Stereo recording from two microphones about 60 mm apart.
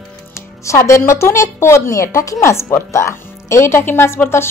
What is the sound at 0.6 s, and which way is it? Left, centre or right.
A woman's voice, left.